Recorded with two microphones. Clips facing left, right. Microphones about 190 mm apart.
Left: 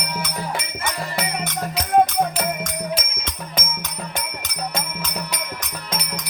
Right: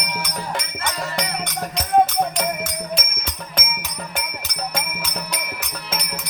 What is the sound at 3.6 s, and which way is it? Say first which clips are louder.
Music: even; 10° right (ahead or behind).